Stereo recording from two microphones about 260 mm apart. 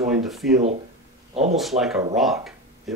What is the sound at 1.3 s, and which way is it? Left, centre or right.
Speech, right.